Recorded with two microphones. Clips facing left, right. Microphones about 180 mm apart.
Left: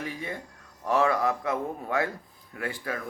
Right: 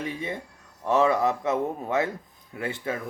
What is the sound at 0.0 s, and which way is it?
A man's voice, 20° right (ahead or behind).